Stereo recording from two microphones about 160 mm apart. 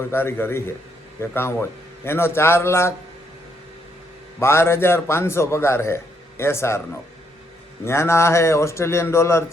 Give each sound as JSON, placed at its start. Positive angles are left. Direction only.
{"t": 0.0, "sound": "a man's voice", "side_deg": 15}
{"t": 4.4, "sound": "a man's voice", "side_deg": 15}
{"t": 7.9, "sound": "a man's voice", "side_deg": 15}